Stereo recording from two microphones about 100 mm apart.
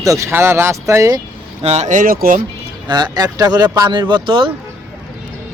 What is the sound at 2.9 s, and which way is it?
Speech, 40° right (ahead or behind).